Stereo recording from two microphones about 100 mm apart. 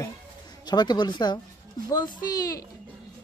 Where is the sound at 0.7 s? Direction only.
45° left (ahead or behind).